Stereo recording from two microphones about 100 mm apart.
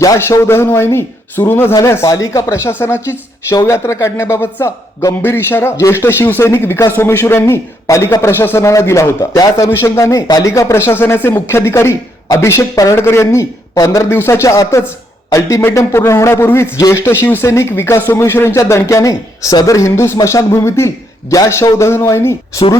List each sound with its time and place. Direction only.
0.0 s speech: 35° left (ahead or behind)
3.5 s speech: 35° left (ahead or behind)